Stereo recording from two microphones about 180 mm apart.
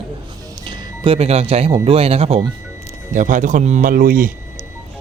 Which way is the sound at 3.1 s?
45° right (ahead or behind).